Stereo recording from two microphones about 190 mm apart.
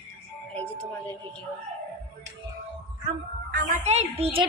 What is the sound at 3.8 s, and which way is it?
Speech, 35° right (ahead or behind).